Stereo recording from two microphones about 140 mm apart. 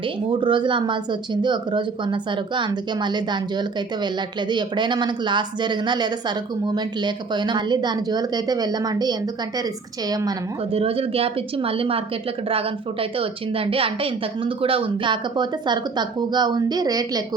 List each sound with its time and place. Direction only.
0.3 s a woman's voice: 35° right (ahead or behind)
10.7 s speech: 45° right (ahead or behind); by 17.2 s 25° right (ahead or behind)